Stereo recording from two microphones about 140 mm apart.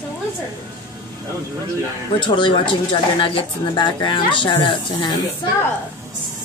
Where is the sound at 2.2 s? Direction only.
35° left (ahead or behind).